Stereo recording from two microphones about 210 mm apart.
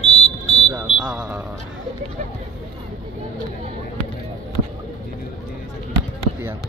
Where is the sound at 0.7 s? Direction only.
5° right (ahead or behind).